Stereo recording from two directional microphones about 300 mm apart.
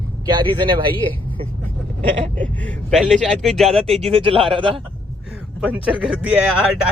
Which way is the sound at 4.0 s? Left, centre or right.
Centre.